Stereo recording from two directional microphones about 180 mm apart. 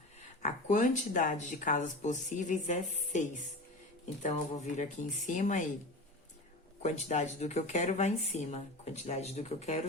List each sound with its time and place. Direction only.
0.4 s speech: 45° left (ahead or behind)
6.8 s speech: 40° left (ahead or behind)